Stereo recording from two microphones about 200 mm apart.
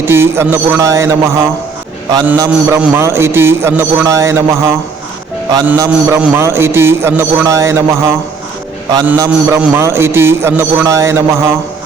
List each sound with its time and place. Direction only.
0.0 s a man's voice: 10° right (ahead or behind)